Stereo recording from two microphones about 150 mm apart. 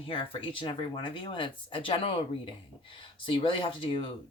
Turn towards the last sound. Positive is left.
turn(degrees=35)  # may be behind; listen again after turning